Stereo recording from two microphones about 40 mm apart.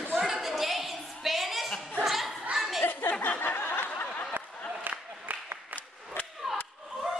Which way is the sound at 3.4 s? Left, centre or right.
Left.